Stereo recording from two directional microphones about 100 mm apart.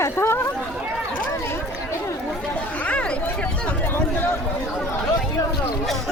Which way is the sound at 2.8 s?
10° left (ahead or behind).